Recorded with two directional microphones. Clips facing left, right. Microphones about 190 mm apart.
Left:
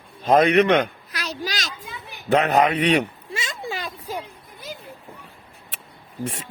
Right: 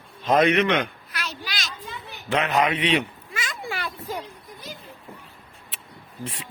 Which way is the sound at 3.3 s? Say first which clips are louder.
Left 2 dB; 20° left (ahead or behind).